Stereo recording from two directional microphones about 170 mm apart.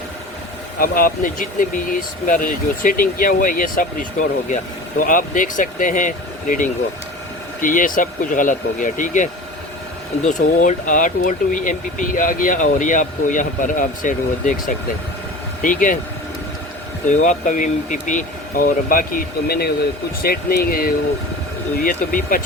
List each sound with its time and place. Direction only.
0.8 s speech: 55° left (ahead or behind)
17.1 s speech: 45° left (ahead or behind)